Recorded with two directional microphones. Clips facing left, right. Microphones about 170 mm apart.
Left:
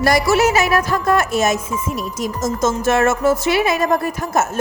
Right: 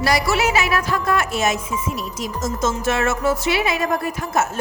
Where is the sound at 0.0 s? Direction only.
45° left (ahead or behind).